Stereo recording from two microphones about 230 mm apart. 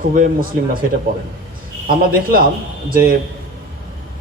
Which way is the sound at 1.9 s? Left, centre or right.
Right.